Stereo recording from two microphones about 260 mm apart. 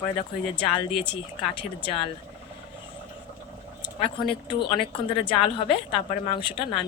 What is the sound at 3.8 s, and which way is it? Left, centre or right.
Speech, centre.